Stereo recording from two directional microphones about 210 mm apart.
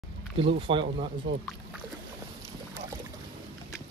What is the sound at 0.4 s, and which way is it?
Speech, 25° right (ahead or behind).